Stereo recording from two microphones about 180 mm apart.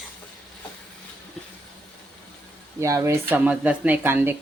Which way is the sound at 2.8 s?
15° right (ahead or behind).